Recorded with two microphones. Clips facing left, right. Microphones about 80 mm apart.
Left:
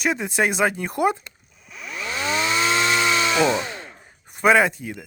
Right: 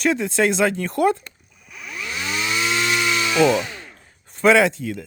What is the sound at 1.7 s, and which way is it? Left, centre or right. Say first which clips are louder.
Chainsaw: left 1 dB; left.